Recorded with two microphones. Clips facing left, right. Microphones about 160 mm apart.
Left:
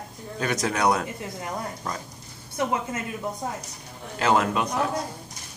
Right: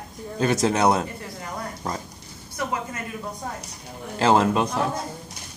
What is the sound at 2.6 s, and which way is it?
Speech, 25° left (ahead or behind).